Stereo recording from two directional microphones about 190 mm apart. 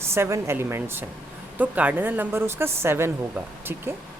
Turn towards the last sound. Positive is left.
turn(degrees=-10)  # may be behind; listen again after turning